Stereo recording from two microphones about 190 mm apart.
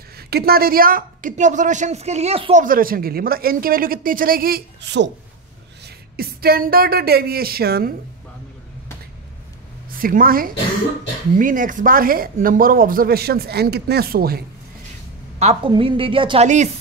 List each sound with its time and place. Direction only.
0.3 s a woman's voice: 55° right (ahead or behind); by 2.6 s 30° right (ahead or behind)
2.6 s speech: 50° right (ahead or behind)
6.1 s speech: 50° right (ahead or behind)
9.9 s speech: 50° right (ahead or behind)
15.3 s a woman's voice: 35° right (ahead or behind)
16.4 s a woman's voice: 40° right (ahead or behind)